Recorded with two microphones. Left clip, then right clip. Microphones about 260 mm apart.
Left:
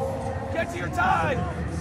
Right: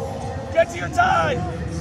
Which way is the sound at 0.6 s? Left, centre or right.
Right.